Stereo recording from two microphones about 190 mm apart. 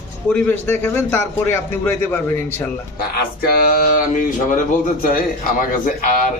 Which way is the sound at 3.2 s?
50° left (ahead or behind).